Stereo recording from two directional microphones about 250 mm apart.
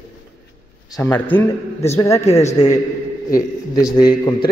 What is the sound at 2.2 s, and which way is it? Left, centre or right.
Speech, left.